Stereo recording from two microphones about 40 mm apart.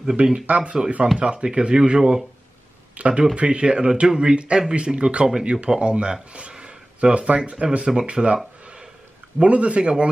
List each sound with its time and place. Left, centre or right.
0.1 s speech: right
3.0 s speech: right
7.8 s speech: right
9.4 s speech: right